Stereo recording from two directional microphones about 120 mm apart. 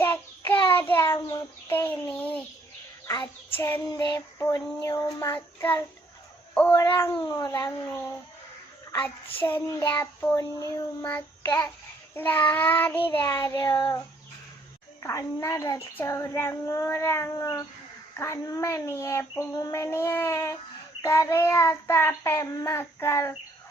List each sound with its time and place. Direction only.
0.0 s child singing: 20° left (ahead or behind)
0.6 s a sound: 15° left (ahead or behind)
3.8 s cat: 35° left (ahead or behind)
4.4 s child singing: 30° left (ahead or behind)
6.5 s speech: 10° left (ahead or behind)
6.7 s cat: 35° left (ahead or behind)
7.5 s child singing: 25° left (ahead or behind)
8.9 s a child's voice: 20° left (ahead or behind)
9.4 s child singing: 25° left (ahead or behind)
11.0 s child singing: 15° left (ahead or behind)
12.1 s a sound: 15° left (ahead or behind)
13.3 s child singing: 20° left (ahead or behind)
13.6 s cat: 35° left (ahead or behind)
15.0 s child singing: 25° left (ahead or behind)